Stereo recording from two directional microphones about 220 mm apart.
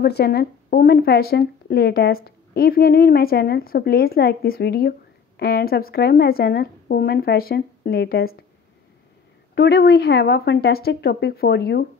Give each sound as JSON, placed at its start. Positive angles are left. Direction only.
{"t": 0.0, "sound": "speech", "side_deg": 45}
{"t": 9.6, "sound": "speech", "side_deg": 45}